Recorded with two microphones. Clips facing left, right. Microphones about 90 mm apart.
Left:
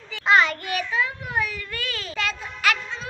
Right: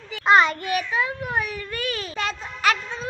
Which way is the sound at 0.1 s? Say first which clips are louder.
Right 2 dB; 25° right (ahead or behind).